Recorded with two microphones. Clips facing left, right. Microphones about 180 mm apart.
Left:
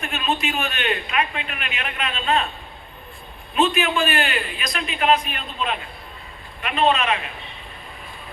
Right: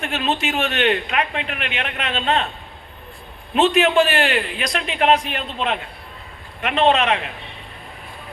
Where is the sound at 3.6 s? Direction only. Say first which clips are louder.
Right 5 dB; 75° right (ahead or behind).